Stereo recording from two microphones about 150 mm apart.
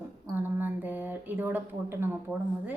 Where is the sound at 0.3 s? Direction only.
15° right (ahead or behind).